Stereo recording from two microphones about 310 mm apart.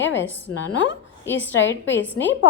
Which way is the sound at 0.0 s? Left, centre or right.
Left.